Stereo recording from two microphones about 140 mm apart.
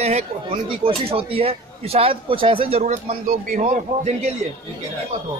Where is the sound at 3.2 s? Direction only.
70° right (ahead or behind); by 4.3 s 55° right (ahead or behind).